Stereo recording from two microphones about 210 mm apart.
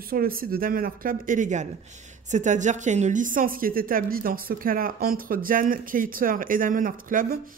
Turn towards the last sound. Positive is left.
turn(degrees=-40)  # may be behind; listen again after turning